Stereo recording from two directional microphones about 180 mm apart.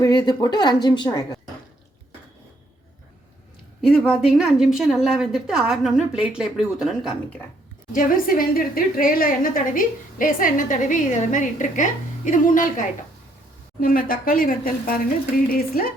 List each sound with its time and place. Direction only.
0.0 s speech: 20° left (ahead or behind)
3.8 s a woman's voice: centre (ahead or behind)
7.9 s a woman's voice: 50° left (ahead or behind)